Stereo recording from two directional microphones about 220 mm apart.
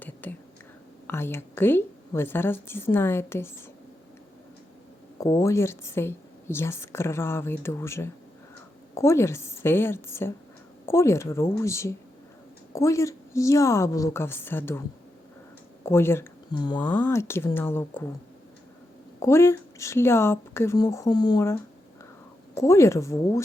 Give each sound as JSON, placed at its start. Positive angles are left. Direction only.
{"t": 0.0, "sound": "whispering", "side_deg": 10}
{"t": 1.0, "sound": "a woman's voice", "side_deg": 10}
{"t": 5.1, "sound": "a woman's voice", "side_deg": 15}
{"t": 16.8, "sound": "a woman's voice", "side_deg": 5}
{"t": 19.2, "sound": "a woman's voice", "side_deg": 10}